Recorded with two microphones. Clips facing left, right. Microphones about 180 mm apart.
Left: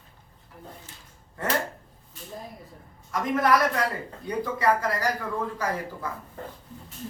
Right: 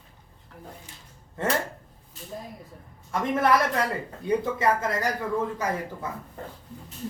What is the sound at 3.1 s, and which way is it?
Speech, 30° right (ahead or behind).